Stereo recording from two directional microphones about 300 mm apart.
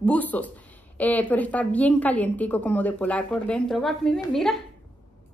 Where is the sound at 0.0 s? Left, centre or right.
Centre.